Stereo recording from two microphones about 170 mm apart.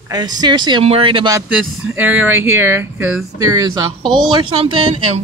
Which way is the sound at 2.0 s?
10° right (ahead or behind).